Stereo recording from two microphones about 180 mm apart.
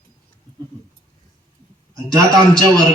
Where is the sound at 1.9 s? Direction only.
20° right (ahead or behind).